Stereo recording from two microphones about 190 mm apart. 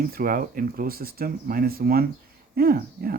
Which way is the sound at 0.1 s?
50° right (ahead or behind).